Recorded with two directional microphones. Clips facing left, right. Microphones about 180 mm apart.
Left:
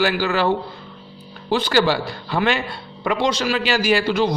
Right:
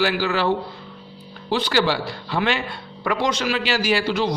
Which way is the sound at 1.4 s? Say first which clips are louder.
Left 3 dB; 50° left (ahead or behind).